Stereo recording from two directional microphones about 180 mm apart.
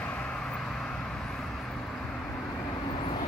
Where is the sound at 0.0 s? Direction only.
5° left (ahead or behind).